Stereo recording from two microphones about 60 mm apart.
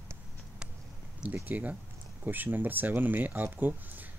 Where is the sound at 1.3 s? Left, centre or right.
Right.